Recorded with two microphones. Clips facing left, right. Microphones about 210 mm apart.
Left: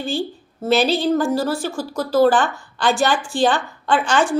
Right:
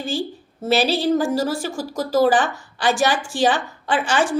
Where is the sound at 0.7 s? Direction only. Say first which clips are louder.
Left 1 dB; 10° right (ahead or behind).